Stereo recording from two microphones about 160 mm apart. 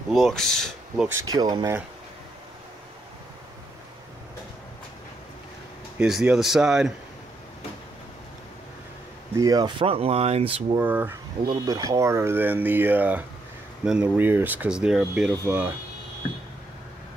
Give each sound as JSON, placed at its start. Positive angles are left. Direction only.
{"t": 0.1, "sound": "speech", "side_deg": 0}
{"t": 1.3, "sound": "speech", "side_deg": -25}
{"t": 5.9, "sound": "speech", "side_deg": -5}
{"t": 9.4, "sound": "speech", "side_deg": -25}
{"t": 10.8, "sound": "speech", "side_deg": -10}
{"t": 11.4, "sound": "speech", "side_deg": -20}